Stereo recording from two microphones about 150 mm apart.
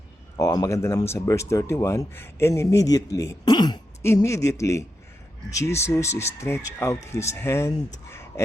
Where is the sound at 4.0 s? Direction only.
15° left (ahead or behind).